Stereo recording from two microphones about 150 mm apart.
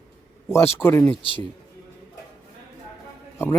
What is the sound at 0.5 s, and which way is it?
Speech, 15° left (ahead or behind).